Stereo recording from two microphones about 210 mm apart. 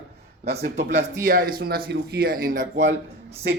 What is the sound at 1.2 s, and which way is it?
Speech, 40° right (ahead or behind).